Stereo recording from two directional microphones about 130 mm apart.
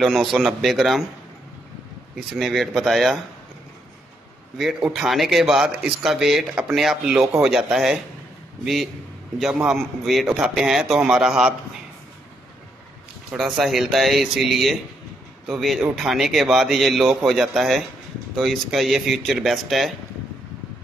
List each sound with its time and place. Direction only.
0.0 s a man's voice: centre (ahead or behind)
2.3 s a man's voice: centre (ahead or behind)
4.6 s a man's voice: centre (ahead or behind)
9.7 s a man's voice: centre (ahead or behind)
13.3 s a man's voice: 5° right (ahead or behind)